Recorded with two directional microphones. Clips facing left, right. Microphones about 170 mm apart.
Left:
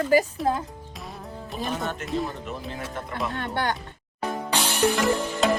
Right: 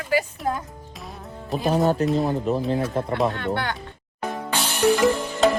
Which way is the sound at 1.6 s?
35° right (ahead or behind).